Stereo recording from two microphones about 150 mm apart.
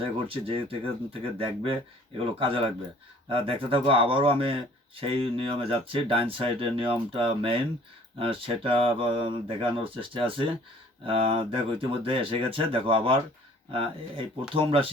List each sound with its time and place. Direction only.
0.0 s speech: 35° right (ahead or behind)